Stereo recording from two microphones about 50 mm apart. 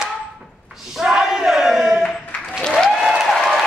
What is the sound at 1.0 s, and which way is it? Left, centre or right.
Battle cry, centre.